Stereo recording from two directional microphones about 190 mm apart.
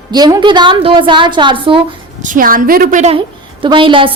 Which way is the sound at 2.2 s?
45° right (ahead or behind).